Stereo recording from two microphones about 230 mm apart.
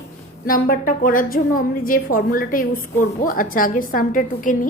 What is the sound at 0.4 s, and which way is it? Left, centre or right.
A woman's voice, left.